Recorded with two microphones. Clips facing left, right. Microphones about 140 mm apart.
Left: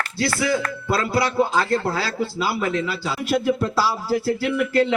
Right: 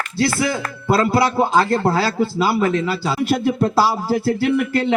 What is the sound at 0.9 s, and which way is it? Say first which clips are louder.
Music: right 6 dB; 30° right (ahead or behind).